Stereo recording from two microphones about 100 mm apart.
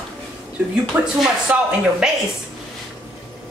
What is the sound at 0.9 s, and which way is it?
Speech, 15° right (ahead or behind).